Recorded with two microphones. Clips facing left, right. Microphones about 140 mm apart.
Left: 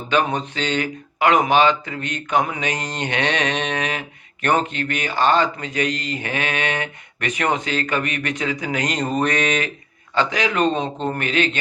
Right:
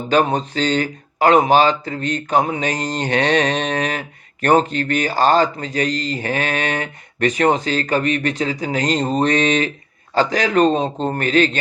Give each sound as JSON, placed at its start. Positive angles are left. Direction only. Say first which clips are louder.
{"t": 0.1, "sound": "speech", "louder": "right 4 dB", "side_deg": -35}